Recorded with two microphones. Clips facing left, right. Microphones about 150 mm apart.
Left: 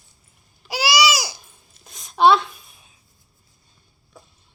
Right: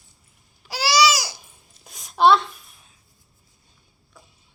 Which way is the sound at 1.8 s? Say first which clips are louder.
Left 1 dB; 5° right (ahead or behind).